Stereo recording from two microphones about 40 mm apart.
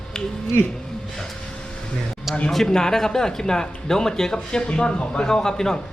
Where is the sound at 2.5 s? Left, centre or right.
Centre.